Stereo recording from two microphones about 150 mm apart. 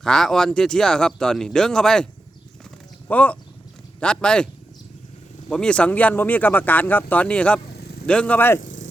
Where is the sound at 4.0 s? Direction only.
5° left (ahead or behind).